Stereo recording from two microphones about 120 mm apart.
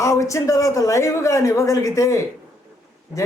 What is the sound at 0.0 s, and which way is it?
A man's voice, 25° left (ahead or behind).